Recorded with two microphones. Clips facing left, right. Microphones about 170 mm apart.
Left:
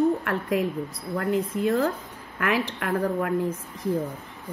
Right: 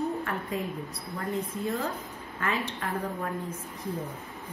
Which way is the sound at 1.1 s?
90° left.